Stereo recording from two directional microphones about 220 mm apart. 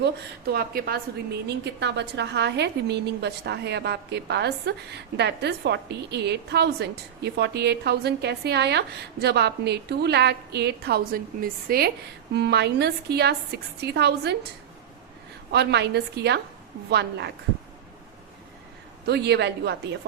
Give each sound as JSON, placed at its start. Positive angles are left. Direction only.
{"t": 0.0, "sound": "a woman's voice", "side_deg": -45}
{"t": 15.5, "sound": "a woman's voice", "side_deg": -50}
{"t": 19.0, "sound": "a woman's voice", "side_deg": -50}